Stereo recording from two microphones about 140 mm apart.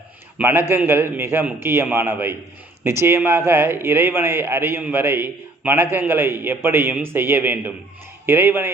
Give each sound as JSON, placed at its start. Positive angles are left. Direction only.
{"t": 0.3, "sound": "a man's voice", "side_deg": -15}